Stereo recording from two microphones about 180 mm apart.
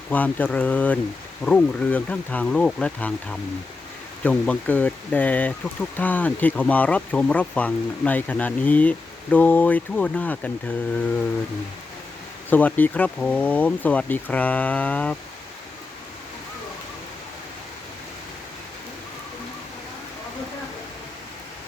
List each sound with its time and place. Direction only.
0.1 s speech: 10° left (ahead or behind)
12.5 s speech: 10° left (ahead or behind)